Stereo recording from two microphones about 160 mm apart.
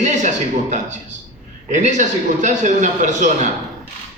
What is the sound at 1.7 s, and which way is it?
A man's voice, 50° right (ahead or behind).